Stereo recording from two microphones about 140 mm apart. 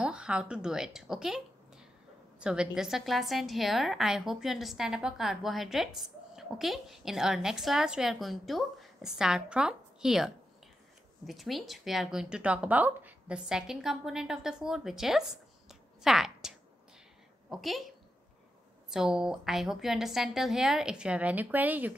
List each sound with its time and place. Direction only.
0.0 s a woman's voice: 5° right (ahead or behind)
2.4 s a woman's voice: 5° right (ahead or behind)